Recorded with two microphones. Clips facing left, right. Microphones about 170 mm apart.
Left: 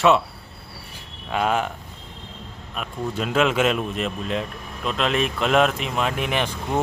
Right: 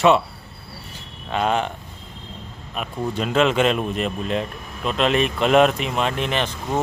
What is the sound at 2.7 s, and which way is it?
Speech, centre (ahead or behind).